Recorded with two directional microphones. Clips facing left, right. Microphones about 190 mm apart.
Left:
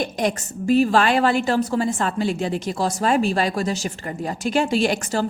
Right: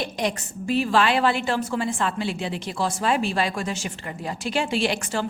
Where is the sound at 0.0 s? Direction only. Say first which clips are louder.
Left 4 dB; 45° left (ahead or behind).